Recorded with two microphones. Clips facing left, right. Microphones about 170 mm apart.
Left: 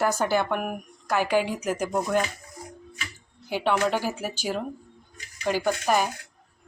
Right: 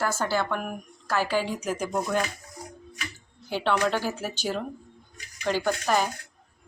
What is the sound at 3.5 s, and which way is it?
Speech, 10° left (ahead or behind).